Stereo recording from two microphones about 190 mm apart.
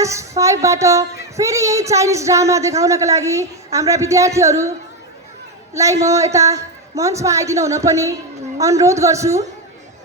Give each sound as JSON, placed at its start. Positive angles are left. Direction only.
{"t": 0.0, "sound": "a woman's voice", "side_deg": -15}
{"t": 5.7, "sound": "a woman's voice", "side_deg": -15}